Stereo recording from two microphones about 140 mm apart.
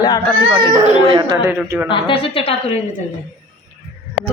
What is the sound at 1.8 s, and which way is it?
Speech, 40° left (ahead or behind).